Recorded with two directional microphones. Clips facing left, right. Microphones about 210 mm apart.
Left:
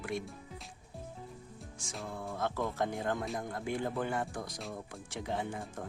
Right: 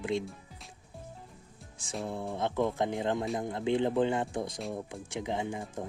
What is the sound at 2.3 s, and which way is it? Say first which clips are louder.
Speech: right 5 dB; 20° right (ahead or behind).